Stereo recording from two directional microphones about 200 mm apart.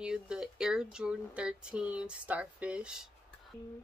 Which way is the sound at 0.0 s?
5° right (ahead or behind).